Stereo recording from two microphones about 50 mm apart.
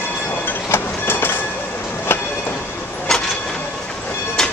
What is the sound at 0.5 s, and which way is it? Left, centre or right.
Train, left.